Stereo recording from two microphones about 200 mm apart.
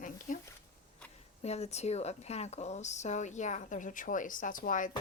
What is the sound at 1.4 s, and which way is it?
A woman's voice, 35° left (ahead or behind).